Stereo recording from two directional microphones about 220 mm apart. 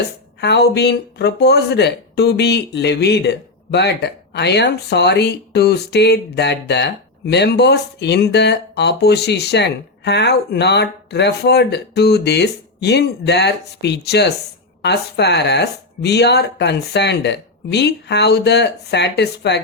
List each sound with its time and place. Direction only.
0.4 s speech: 50° left (ahead or behind)